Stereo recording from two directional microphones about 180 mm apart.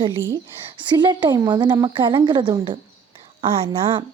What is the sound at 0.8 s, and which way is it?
A woman's voice, 25° right (ahead or behind).